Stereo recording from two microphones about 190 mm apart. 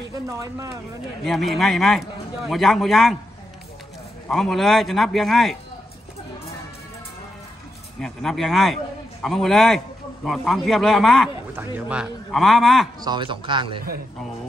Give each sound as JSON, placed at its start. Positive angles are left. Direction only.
{"t": 0.3, "sound": "speech", "side_deg": -15}
{"t": 1.2, "sound": "a man's voice", "side_deg": 0}
{"t": 4.3, "sound": "a man's voice", "side_deg": 0}
{"t": 8.0, "sound": "a man's voice", "side_deg": 0}
{"t": 13.0, "sound": "speech", "side_deg": -25}